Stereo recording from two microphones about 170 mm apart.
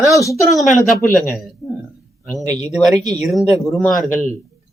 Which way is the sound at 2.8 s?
Centre (ahead or behind).